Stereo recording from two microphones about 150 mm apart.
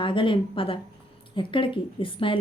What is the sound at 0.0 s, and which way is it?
A woman's voice, 35° left (ahead or behind).